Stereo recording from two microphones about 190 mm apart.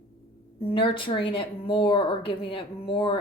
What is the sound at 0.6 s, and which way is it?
Speech, 30° left (ahead or behind).